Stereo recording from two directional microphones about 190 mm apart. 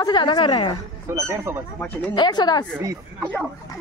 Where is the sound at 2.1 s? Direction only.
25° left (ahead or behind).